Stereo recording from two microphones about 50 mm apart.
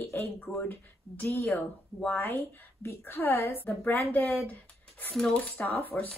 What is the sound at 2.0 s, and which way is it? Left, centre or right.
Speech, left.